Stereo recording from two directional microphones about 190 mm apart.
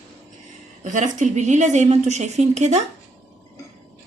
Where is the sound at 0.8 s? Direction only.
40° right (ahead or behind).